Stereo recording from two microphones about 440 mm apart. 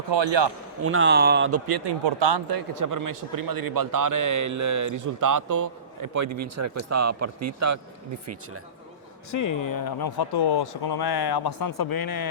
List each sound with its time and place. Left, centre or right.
0.1 s speech: right
0.8 s speech: right
1.6 s a man's voice: right
9.3 s speech: left